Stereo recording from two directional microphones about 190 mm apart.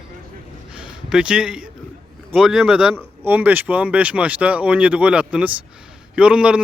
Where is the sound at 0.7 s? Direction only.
5° right (ahead or behind).